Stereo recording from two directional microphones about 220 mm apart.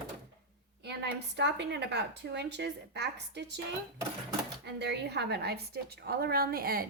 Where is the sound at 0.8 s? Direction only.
50° right (ahead or behind).